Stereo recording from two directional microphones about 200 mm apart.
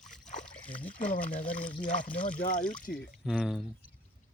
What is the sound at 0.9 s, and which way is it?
Speech, 40° left (ahead or behind).